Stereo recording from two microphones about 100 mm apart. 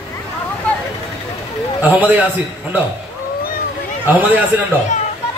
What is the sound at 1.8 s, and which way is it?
Speech, 15° right (ahead or behind).